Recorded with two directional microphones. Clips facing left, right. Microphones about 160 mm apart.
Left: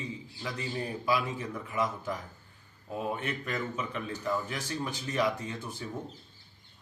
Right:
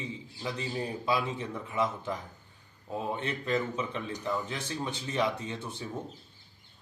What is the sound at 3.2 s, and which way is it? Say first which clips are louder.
A man's voice: right 4 dB; 25° right (ahead or behind).